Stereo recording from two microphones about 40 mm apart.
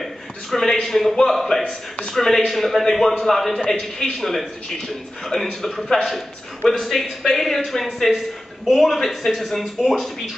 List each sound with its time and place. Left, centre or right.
0.0 s a sound: centre
0.8 s a woman's voice: centre
1.6 s speech: left
2.1 s a woman's voice: centre